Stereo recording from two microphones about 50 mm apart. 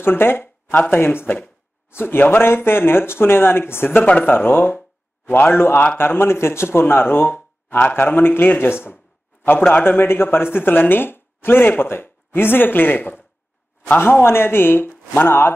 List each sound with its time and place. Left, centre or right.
0.0 s a sound: left
0.7 s speech: left
4.0 s speech: left